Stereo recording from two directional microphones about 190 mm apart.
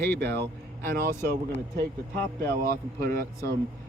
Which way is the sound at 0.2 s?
60° right (ahead or behind).